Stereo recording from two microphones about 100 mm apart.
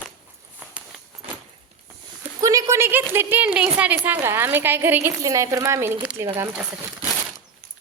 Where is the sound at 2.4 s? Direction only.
35° right (ahead or behind); by 5.1 s 20° right (ahead or behind).